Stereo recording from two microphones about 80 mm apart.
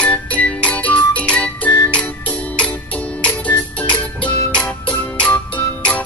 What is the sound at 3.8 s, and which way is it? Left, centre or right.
Music, centre.